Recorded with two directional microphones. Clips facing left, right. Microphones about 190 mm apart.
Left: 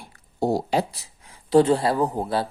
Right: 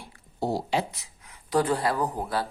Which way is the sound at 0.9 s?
30° left (ahead or behind).